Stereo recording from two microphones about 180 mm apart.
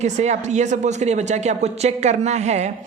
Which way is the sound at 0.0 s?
40° right (ahead or behind).